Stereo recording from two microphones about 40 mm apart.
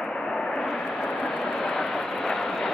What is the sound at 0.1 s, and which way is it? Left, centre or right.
Vehicle, centre.